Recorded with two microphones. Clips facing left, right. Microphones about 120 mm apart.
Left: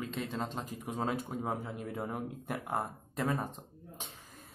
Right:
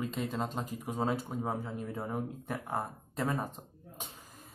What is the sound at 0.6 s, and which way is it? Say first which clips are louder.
Speech: right 2 dB; 40° right (ahead or behind).